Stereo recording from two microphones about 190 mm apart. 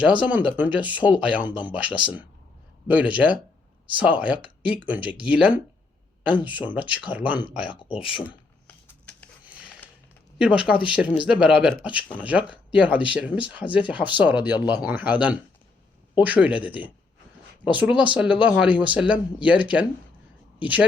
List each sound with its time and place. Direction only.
0.0 s speech: 5° right (ahead or behind)
7.7 s speech: 25° left (ahead or behind)
8.6 s a sound: 5° left (ahead or behind)
10.3 s speech: 5° right (ahead or behind)